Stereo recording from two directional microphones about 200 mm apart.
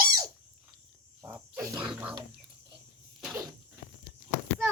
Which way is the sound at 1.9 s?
5° right (ahead or behind).